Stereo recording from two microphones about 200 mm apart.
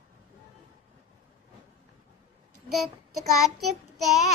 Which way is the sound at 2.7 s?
Centre (ahead or behind).